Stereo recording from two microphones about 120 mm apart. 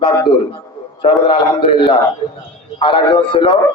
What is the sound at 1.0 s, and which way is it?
A man's voice, 45° left (ahead or behind).